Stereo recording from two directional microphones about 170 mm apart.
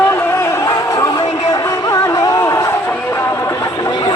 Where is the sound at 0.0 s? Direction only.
15° left (ahead or behind).